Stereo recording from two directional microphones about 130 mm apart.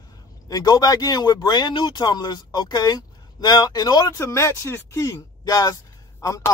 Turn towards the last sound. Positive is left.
turn(degrees=25)  # may be behind; listen again after turning